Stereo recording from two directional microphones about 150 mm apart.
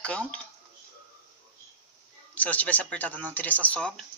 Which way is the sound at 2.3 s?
10° left (ahead or behind).